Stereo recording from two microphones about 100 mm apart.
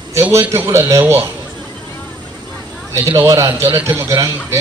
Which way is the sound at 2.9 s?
30° right (ahead or behind).